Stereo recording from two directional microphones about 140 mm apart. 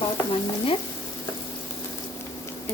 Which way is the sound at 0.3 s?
40° left (ahead or behind).